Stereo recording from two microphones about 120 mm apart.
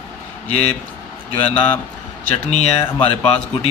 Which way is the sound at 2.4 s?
60° left (ahead or behind).